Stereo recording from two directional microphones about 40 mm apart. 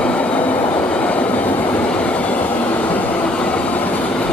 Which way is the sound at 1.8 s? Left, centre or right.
Left.